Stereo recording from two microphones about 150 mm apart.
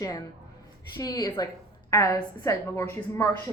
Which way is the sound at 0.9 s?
25° left (ahead or behind).